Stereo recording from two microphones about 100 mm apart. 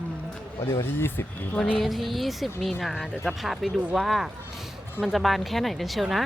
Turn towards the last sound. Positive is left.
turn(degrees=0)  # may be behind; listen again after turning